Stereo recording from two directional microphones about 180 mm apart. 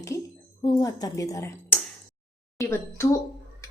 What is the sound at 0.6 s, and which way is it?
A woman's voice, 20° left (ahead or behind).